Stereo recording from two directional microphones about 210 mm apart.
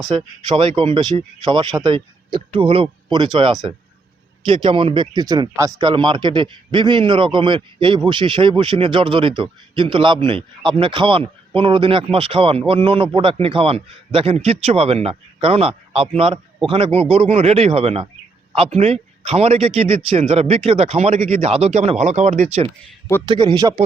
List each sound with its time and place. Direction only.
0.1 s speech: 25° right (ahead or behind)
23.2 s speech: 20° right (ahead or behind)